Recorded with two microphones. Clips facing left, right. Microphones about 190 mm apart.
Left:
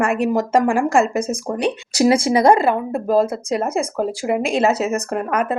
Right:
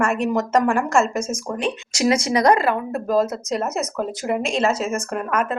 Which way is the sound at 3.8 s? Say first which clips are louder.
Left 3 dB; 30° left (ahead or behind).